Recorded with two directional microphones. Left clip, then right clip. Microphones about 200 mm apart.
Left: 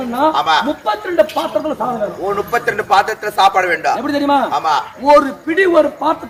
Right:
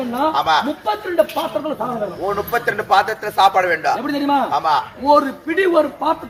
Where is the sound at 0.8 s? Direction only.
15° left (ahead or behind).